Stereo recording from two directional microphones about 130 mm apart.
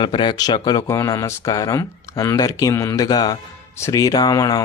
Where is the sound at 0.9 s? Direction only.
25° left (ahead or behind).